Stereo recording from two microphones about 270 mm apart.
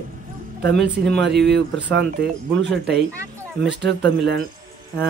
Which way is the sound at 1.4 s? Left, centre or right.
Right.